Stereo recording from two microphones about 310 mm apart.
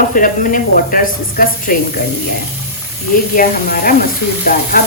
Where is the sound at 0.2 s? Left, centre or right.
Left.